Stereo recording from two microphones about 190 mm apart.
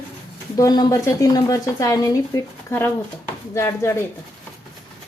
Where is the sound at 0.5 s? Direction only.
20° left (ahead or behind).